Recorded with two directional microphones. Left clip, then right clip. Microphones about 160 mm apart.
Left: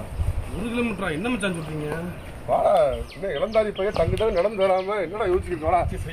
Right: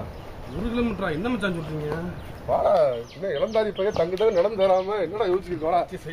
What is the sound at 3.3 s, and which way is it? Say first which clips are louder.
Speech: left 1 dB; 20° right (ahead or behind).